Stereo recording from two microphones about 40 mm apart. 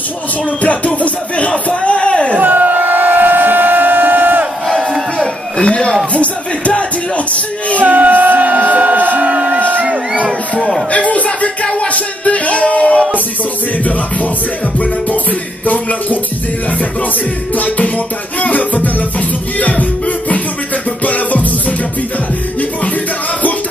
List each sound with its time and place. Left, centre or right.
0.6 s music: left
2.3 s crowd: right
4.6 s music: centre
5.6 s speech: left
6.1 s music: left
7.8 s a sound: right
10.9 s music: left
15.6 s music: left
17.6 s music: left